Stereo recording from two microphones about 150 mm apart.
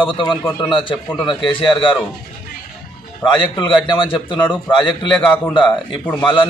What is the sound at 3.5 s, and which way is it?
A man's voice, 35° left (ahead or behind).